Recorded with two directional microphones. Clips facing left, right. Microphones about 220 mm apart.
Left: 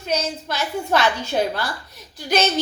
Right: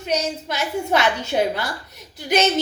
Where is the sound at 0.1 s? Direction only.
20° right (ahead or behind).